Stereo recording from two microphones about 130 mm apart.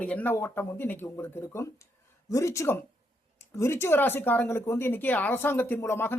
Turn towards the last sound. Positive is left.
turn(degrees=20)  # may be behind; listen again after turning